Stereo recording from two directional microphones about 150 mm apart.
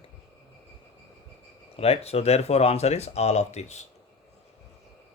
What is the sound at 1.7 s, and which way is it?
Speech, 40° left (ahead or behind).